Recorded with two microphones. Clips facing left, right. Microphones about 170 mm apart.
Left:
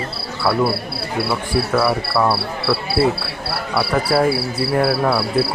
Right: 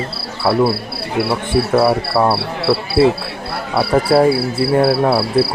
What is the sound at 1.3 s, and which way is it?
Speech, 25° right (ahead or behind).